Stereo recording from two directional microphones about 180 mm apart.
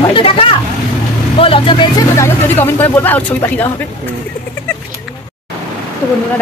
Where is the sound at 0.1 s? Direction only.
30° left (ahead or behind); by 3.6 s 10° left (ahead or behind).